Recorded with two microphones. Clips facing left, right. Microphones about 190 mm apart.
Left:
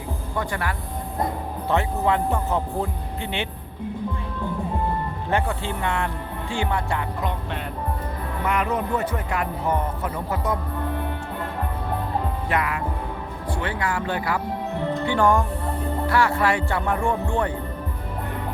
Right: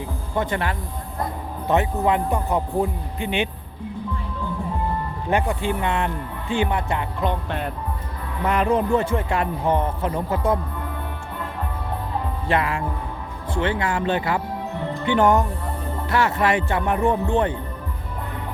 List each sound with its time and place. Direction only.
0.3 s speech: 25° right (ahead or behind)
5.3 s speech: 15° right (ahead or behind)
8.4 s speech: 30° right (ahead or behind)
12.5 s speech: 30° right (ahead or behind)